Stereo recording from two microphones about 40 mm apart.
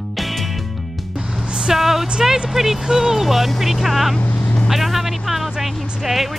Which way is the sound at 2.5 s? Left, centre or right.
Centre.